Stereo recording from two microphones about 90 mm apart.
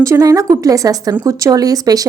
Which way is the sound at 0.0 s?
40° right (ahead or behind).